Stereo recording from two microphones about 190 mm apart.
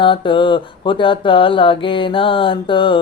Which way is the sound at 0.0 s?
25° left (ahead or behind).